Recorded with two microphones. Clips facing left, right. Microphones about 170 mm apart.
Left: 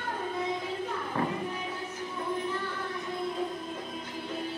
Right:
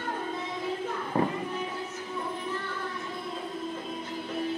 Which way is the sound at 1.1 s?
35° right (ahead or behind).